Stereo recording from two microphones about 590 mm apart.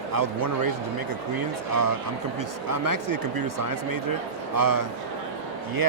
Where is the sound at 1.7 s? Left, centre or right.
Right.